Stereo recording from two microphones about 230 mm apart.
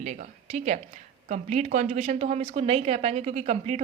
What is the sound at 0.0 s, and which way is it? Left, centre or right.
A woman's voice, right.